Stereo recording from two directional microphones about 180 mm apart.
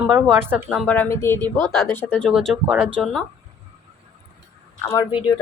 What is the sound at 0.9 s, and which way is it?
Speech, 15° left (ahead or behind).